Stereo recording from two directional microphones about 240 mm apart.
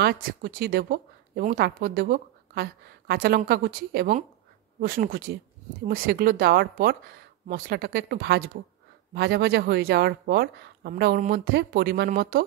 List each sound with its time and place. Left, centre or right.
0.0 s speech: right